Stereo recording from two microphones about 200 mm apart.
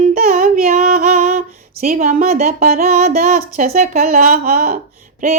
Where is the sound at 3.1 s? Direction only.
45° right (ahead or behind).